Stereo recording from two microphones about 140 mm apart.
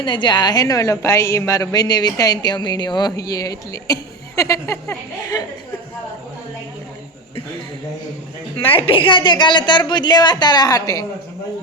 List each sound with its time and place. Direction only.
0.0 s a woman's voice: 35° left (ahead or behind)
8.7 s a woman's voice: 40° left (ahead or behind)